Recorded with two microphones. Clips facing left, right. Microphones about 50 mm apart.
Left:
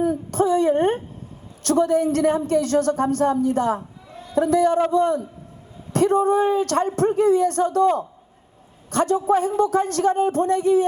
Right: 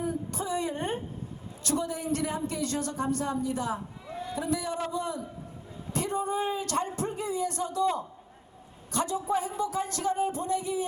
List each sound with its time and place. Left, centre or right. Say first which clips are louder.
0.0 s a woman's voice: left 12 dB; left